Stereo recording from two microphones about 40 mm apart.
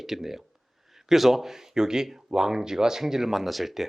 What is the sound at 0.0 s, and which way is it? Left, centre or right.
Speech, centre.